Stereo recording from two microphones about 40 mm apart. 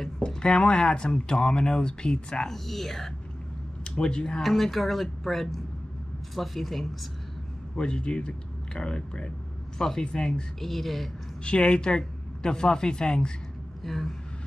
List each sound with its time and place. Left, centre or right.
0.2 s speech: centre
2.4 s speech: centre
3.8 s speech: left
4.4 s speech: centre
7.7 s a woman's voice: left
10.6 s speech: centre
11.4 s a woman's voice: left
13.8 s speech: centre